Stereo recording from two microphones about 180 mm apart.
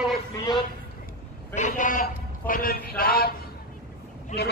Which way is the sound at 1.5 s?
45° left (ahead or behind).